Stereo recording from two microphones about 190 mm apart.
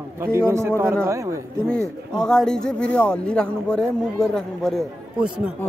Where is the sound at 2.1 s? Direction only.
5° left (ahead or behind).